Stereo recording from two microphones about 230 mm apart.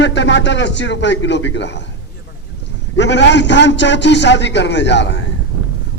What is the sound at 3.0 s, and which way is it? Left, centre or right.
A man's voice, left.